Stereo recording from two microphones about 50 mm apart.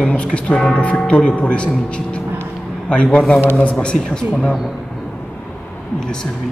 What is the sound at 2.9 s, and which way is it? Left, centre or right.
Speech, left.